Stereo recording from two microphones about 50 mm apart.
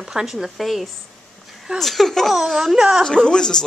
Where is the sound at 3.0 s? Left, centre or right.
Centre.